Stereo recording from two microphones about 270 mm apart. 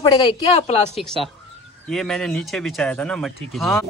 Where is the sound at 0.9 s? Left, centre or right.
Centre.